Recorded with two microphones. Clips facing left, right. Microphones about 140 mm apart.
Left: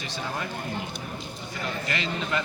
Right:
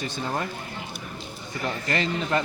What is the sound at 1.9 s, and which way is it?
Speech, 40° right (ahead or behind).